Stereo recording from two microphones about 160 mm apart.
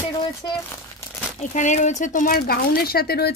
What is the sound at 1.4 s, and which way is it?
Speech, 50° left (ahead or behind).